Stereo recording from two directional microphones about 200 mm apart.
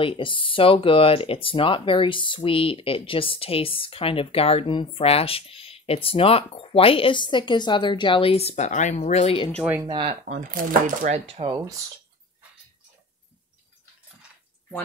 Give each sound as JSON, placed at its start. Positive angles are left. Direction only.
{"t": 0.0, "sound": "speech", "side_deg": 25}
{"t": 9.8, "sound": "speech", "side_deg": -25}
{"t": 10.2, "sound": "speech", "side_deg": -40}
{"t": 11.5, "sound": "speech", "side_deg": -15}